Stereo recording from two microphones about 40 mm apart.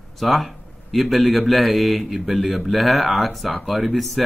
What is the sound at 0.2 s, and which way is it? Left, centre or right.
A man's voice, centre.